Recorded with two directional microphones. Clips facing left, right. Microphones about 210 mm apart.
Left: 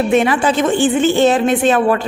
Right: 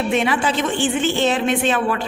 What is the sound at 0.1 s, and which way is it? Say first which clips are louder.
A woman's voice: left 5 dB; 45° left (ahead or behind).